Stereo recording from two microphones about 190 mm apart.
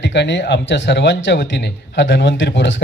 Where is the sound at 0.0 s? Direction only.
70° left (ahead or behind).